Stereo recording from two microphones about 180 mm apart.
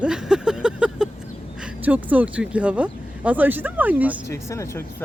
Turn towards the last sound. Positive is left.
turn(degrees=15)  # may be behind; listen again after turning